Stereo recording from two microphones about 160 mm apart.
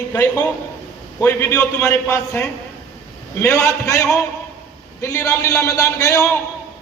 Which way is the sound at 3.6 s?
20° left (ahead or behind).